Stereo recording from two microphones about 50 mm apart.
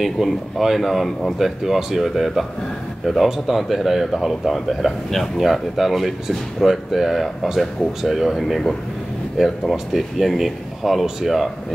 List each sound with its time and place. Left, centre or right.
0.0 s speech: centre